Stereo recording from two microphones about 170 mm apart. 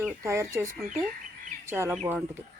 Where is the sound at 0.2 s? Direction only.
15° right (ahead or behind).